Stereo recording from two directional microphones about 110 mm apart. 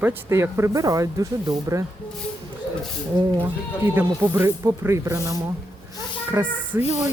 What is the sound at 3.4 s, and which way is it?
Speech, 20° right (ahead or behind).